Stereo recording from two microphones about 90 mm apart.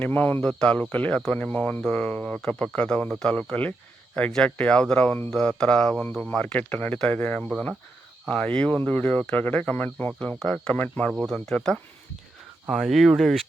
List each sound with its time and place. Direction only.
0.0 s speech: 20° left (ahead or behind); by 13.4 s centre (ahead or behind)